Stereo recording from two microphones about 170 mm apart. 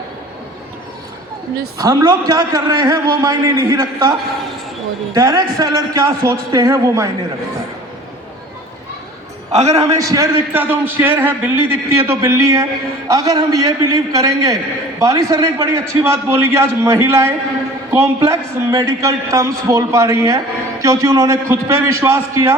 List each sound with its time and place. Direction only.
1.8 s a man's voice: 20° right (ahead or behind)
5.1 s a man's voice: 20° right (ahead or behind)
10.0 s a man's voice: 20° right (ahead or behind)